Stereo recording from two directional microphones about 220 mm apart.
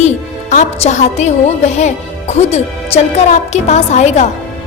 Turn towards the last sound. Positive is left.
turn(degrees=30)  # may be behind; listen again after turning